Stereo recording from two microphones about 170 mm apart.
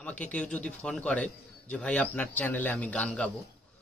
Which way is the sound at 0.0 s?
10° left (ahead or behind).